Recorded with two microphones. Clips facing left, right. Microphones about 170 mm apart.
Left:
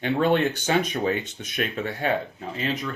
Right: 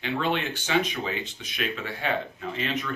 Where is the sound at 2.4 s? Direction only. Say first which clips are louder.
Left 2 dB; 35° left (ahead or behind).